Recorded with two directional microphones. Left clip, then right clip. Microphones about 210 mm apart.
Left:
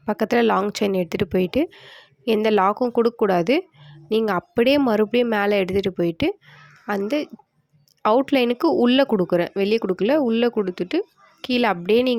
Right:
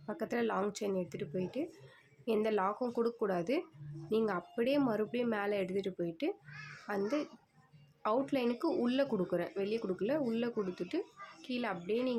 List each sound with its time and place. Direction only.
0.0 s speech: 45° left (ahead or behind)